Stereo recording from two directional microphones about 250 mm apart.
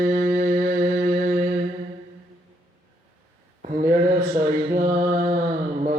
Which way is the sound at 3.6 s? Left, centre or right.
Right.